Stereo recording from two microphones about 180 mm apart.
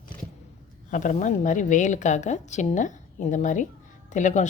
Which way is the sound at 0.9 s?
45° left (ahead or behind).